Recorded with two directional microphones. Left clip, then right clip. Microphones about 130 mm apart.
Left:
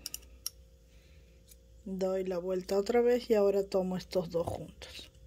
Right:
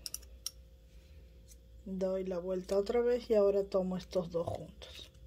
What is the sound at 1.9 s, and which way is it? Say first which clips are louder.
Speech: left 3 dB; 45° left (ahead or behind).